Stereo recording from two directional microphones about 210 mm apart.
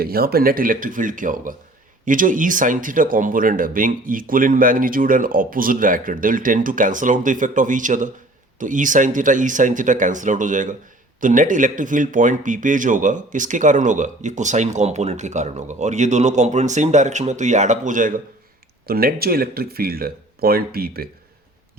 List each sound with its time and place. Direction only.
0.0 s a man's voice: 45° right (ahead or behind)